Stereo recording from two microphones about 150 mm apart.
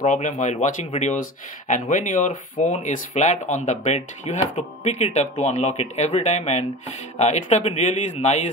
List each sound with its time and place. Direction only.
0.0 s speech: 55° left (ahead or behind)